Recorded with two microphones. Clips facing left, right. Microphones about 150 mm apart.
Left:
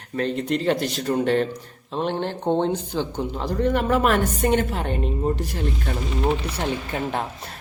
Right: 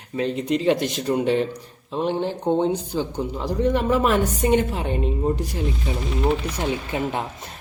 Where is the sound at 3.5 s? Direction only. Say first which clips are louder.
Right 1 dB; 15° right (ahead or behind).